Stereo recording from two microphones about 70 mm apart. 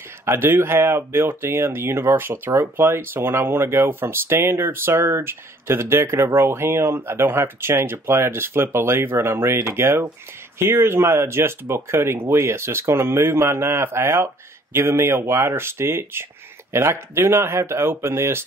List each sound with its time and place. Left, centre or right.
0.2 s speech: right